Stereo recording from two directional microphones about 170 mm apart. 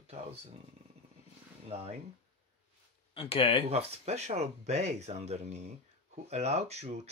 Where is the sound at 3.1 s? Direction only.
35° left (ahead or behind).